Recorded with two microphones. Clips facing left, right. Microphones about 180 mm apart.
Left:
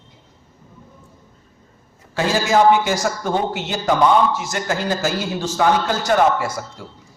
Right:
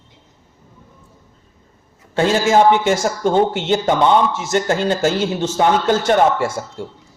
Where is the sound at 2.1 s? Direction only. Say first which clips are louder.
Right 3 dB; 25° right (ahead or behind).